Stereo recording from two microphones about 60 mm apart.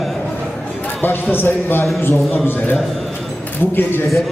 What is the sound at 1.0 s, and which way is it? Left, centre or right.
A man's voice, left.